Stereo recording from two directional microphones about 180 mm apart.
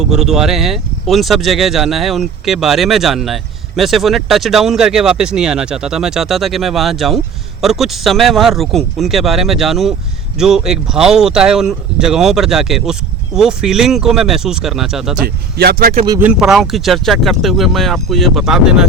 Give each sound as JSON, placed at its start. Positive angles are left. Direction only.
{"t": 0.0, "sound": "speech", "side_deg": 0}
{"t": 15.2, "sound": "speech", "side_deg": -55}
{"t": 16.0, "sound": "speech", "side_deg": -15}
{"t": 16.3, "sound": "speech", "side_deg": 0}